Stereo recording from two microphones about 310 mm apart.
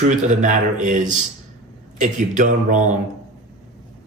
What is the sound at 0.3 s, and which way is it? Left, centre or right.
Speech, right.